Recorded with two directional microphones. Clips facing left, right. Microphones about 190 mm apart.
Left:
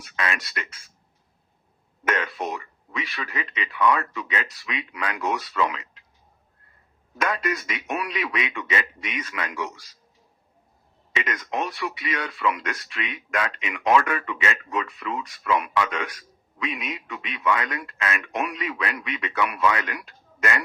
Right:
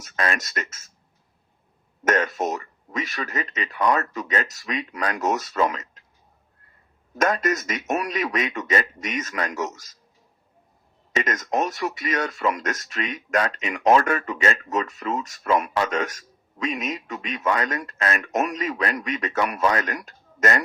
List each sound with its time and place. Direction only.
0.0 s speech: 45° right (ahead or behind)
2.0 s speech: 45° right (ahead or behind)
7.2 s speech: 45° right (ahead or behind)
11.1 s speech: 45° right (ahead or behind)